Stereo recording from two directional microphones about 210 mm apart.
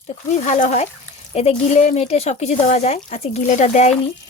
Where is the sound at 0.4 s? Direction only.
35° left (ahead or behind).